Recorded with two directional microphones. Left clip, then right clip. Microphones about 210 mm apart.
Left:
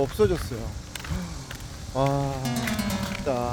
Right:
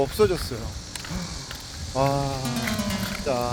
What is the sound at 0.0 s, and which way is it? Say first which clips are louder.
Speech: right 2 dB; 10° right (ahead or behind).